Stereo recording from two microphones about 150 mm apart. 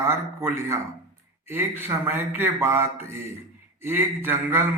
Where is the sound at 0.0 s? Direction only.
15° right (ahead or behind).